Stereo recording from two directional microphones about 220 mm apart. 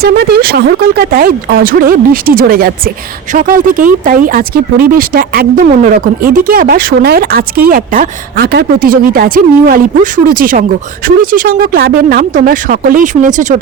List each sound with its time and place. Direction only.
0.0 s speech: 45° right (ahead or behind)